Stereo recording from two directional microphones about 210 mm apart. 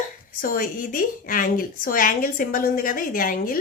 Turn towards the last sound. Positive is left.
turn(degrees=40)  # may be behind; listen again after turning